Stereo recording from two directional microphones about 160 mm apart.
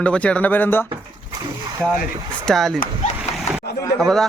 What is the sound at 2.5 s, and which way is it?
Speech, centre (ahead or behind).